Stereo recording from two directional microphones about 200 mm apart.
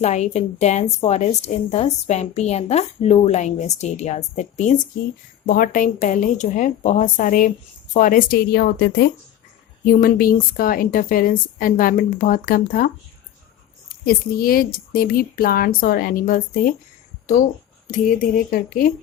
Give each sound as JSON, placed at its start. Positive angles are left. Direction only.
{"t": 0.0, "sound": "a woman's voice", "side_deg": 35}
{"t": 14.0, "sound": "a woman's voice", "side_deg": 50}
{"t": 17.9, "sound": "a woman's voice", "side_deg": 45}